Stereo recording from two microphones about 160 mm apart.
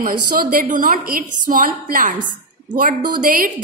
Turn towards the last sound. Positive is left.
turn(degrees=-60)  # may be behind; listen again after turning